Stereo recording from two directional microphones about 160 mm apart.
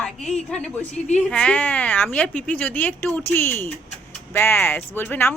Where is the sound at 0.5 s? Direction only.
5° left (ahead or behind).